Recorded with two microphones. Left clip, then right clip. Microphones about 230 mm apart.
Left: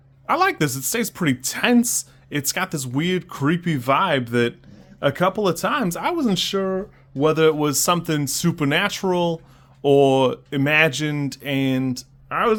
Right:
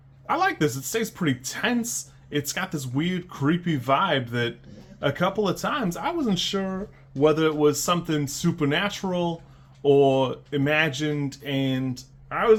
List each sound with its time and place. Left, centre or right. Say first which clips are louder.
0.3 s speech: left 4 dB; left